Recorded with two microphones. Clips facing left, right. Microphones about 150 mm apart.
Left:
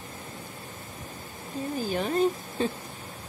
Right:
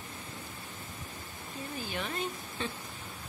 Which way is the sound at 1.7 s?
40° left (ahead or behind).